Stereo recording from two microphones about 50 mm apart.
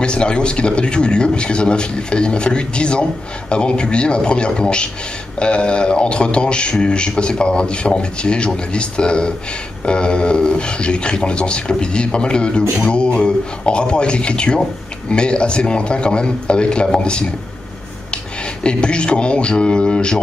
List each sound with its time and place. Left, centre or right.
0.0 s speech: centre